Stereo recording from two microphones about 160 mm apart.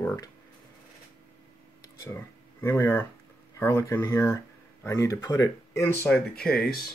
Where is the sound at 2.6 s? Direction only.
15° left (ahead or behind).